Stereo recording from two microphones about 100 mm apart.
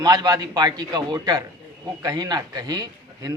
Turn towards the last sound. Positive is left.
turn(degrees=-45)  # may be behind; listen again after turning